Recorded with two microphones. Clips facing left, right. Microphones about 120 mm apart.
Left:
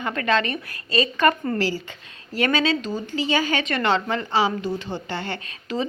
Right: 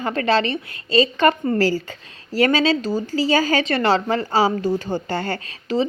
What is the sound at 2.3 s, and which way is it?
A woman's voice, 30° right (ahead or behind).